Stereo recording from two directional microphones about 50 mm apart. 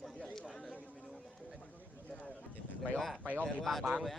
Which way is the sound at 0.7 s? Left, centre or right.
Left.